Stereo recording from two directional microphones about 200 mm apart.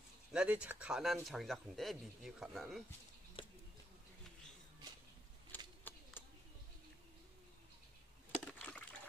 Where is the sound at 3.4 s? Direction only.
25° left (ahead or behind).